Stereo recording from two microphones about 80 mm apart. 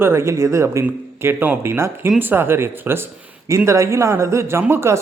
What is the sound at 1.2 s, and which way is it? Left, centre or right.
A man's voice, right.